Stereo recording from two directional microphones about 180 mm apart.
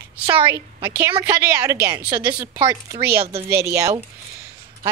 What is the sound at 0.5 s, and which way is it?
A woman's voice, 15° right (ahead or behind).